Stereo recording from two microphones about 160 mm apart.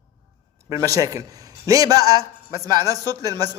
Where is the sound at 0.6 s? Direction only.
20° right (ahead or behind).